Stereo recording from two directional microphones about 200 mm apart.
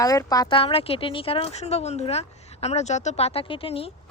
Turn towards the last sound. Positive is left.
turn(degrees=30)  # may be behind; listen again after turning